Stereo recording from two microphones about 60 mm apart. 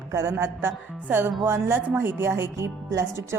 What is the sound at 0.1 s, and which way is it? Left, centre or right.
Speech, right.